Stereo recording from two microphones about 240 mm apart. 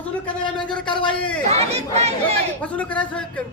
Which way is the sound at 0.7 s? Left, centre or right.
Centre.